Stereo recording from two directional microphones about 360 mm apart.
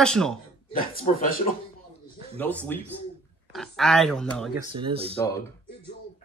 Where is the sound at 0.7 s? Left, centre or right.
Left.